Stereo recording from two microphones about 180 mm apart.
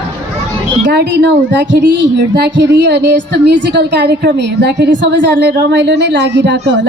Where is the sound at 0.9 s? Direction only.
75° right (ahead or behind).